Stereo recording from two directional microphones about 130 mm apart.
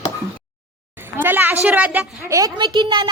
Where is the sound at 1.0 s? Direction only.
15° right (ahead or behind).